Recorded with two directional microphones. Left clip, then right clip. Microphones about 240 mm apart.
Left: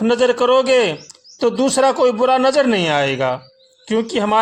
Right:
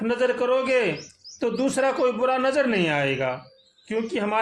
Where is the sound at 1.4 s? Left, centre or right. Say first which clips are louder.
Left 8 dB; left.